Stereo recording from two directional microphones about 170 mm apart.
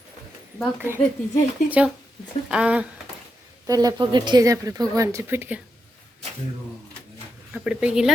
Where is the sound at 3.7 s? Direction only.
20° right (ahead or behind).